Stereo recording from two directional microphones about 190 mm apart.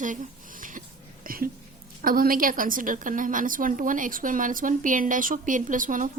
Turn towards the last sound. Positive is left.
turn(degrees=-45)  # may be behind; listen again after turning